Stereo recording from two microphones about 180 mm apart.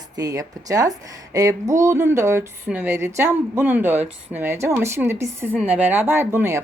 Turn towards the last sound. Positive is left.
turn(degrees=-15)  # may be behind; listen again after turning